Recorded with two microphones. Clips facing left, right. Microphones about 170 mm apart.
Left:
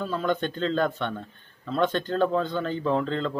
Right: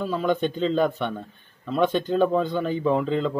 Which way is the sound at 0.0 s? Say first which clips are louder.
Right 3 dB; 5° right (ahead or behind).